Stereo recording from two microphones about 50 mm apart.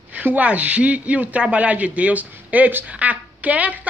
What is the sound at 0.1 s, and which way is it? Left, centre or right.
A woman's voice, right.